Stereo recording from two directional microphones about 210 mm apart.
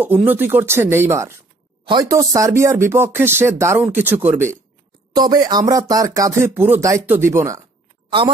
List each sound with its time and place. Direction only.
0.0 s a woman's voice: 10° right (ahead or behind)